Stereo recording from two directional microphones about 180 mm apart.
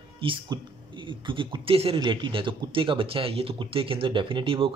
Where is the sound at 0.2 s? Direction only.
30° right (ahead or behind).